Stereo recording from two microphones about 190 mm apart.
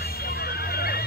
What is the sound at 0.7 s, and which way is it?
Horse, 55° left (ahead or behind).